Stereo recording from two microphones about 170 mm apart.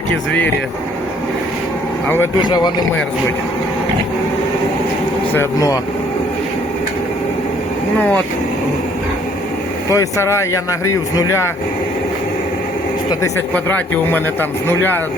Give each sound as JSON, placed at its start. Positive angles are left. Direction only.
{"t": 2.0, "sound": "speech", "side_deg": 15}
{"t": 2.4, "sound": "speech", "side_deg": 25}
{"t": 5.3, "sound": "speech", "side_deg": 15}
{"t": 7.9, "sound": "speech", "side_deg": 10}
{"t": 9.9, "sound": "speech", "side_deg": 15}
{"t": 13.2, "sound": "speech", "side_deg": 10}